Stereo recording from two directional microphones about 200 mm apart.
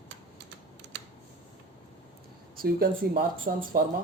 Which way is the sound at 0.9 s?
65° right (ahead or behind).